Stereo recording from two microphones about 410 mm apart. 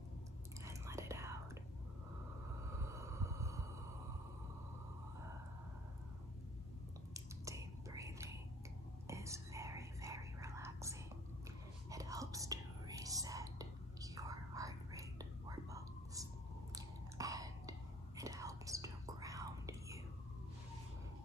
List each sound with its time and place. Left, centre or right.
0.7 s whispering: centre
2.8 s a sound: centre
7.2 s whispering: centre